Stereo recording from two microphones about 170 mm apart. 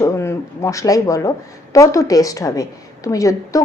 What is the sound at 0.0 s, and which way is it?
A woman's voice, 15° left (ahead or behind).